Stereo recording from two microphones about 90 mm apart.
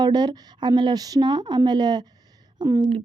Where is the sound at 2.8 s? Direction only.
80° right.